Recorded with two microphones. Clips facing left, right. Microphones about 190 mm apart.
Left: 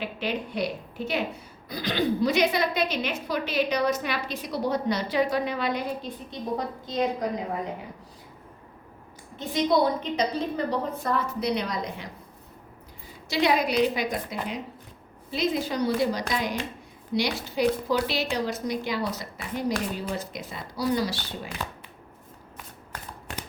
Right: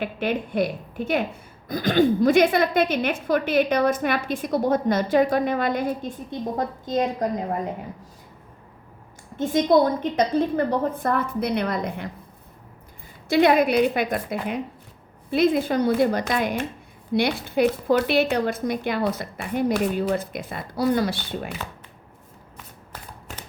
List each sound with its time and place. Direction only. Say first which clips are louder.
0.0 s a woman's voice: right 5 dB; 50° right (ahead or behind)
9.4 s a woman's voice: right 5 dB; 50° right (ahead or behind)
13.2 s speech: right 6 dB; 55° right (ahead or behind)